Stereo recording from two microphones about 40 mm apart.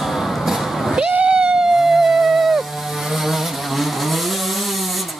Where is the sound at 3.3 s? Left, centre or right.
Centre.